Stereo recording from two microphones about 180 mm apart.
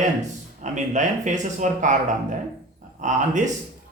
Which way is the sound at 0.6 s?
40° right (ahead or behind).